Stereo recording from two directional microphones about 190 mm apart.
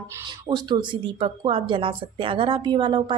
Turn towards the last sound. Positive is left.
turn(degrees=-25)  # may be behind; listen again after turning